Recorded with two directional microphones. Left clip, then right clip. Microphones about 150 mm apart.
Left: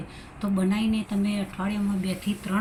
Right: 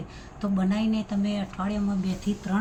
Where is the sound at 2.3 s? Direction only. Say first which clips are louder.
Right 1 dB; 45° right (ahead or behind).